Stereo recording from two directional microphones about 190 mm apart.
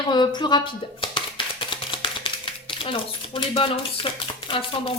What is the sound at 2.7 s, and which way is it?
Speech, 25° left (ahead or behind).